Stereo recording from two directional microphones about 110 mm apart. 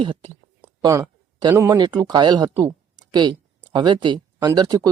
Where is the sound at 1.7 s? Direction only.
40° right (ahead or behind).